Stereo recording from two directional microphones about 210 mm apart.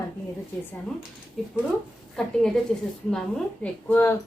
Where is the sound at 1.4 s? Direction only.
Centre (ahead or behind).